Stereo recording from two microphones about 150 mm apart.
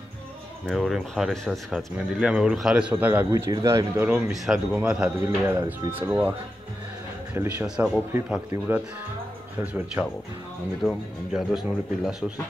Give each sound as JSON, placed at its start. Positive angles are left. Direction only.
{"t": 0.7, "sound": "a man's voice", "side_deg": 0}
{"t": 3.9, "sound": "a man's voice", "side_deg": -10}
{"t": 7.6, "sound": "a man's voice", "side_deg": -5}
{"t": 10.8, "sound": "speech", "side_deg": 0}